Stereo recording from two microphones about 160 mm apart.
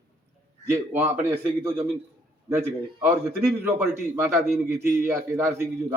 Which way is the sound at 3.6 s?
10° right (ahead or behind).